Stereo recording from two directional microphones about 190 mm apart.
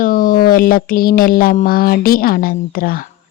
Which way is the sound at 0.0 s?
45° left (ahead or behind).